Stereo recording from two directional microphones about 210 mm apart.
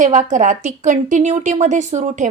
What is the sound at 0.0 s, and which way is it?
A woman's voice, 35° right (ahead or behind).